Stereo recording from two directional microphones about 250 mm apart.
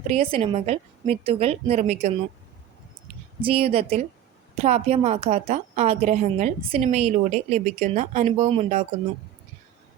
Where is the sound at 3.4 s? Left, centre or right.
Right.